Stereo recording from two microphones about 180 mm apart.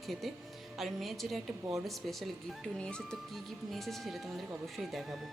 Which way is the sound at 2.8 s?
5° left (ahead or behind).